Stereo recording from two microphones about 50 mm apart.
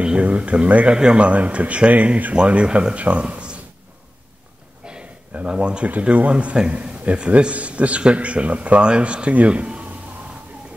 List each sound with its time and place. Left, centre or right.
0.0 s a man's voice: right
4.8 s a sound: centre
5.3 s a man's voice: right
5.9 s a man's voice: right